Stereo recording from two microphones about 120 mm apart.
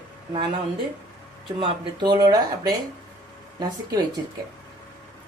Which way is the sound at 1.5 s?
40° right (ahead or behind).